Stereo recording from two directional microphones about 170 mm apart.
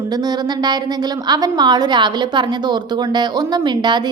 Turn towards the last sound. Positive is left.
turn(degrees=-25)  # may be behind; listen again after turning